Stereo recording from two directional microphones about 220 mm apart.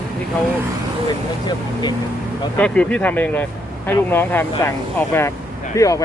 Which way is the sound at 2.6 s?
5° left (ahead or behind).